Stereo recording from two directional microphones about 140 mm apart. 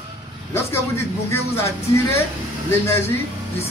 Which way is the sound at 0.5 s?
15° left (ahead or behind).